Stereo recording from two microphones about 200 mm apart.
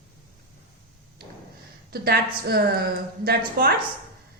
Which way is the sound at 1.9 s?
50° right (ahead or behind).